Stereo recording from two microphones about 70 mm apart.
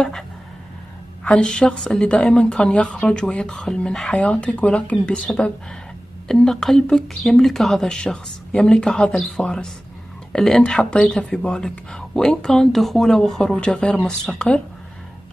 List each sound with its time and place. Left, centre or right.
1.2 s speech: centre
3.6 s speech: centre
6.2 s speech: centre